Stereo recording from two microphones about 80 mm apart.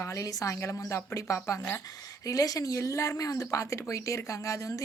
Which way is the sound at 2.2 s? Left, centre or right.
Left.